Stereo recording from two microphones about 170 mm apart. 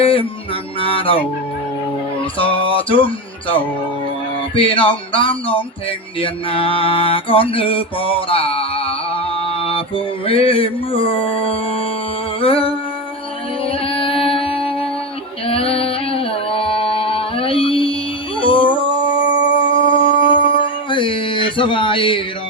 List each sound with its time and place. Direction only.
0.0 s music: 30° left (ahead or behind)
0.8 s mantra: 30° left (ahead or behind)
2.4 s mantra: 30° left (ahead or behind)
4.5 s speech: 30° left (ahead or behind)
6.1 s mantra: 30° left (ahead or behind)
13.7 s music: 30° left (ahead or behind)
15.4 s a sound: 35° left (ahead or behind)
18.3 s dog: 30° left (ahead or behind)
19.5 s mantra: 30° left (ahead or behind)